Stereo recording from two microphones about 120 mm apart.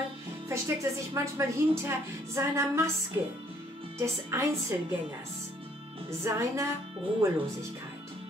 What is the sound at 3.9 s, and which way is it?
Speech, 25° right (ahead or behind).